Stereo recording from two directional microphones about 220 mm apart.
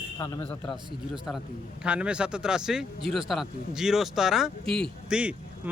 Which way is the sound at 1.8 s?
5° right (ahead or behind).